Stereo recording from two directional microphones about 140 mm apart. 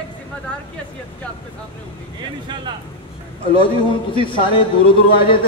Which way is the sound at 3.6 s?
40° left (ahead or behind).